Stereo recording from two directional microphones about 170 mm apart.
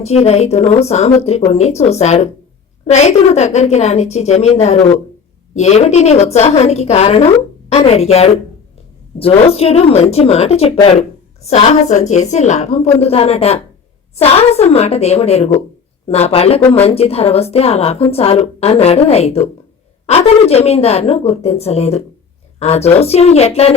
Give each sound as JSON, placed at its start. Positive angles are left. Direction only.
{"t": 0.0, "sound": "a woman's voice", "side_deg": 40}
{"t": 9.5, "sound": "a woman's voice", "side_deg": 35}
{"t": 16.6, "sound": "speech", "side_deg": 10}
{"t": 16.8, "sound": "a woman's voice", "side_deg": 35}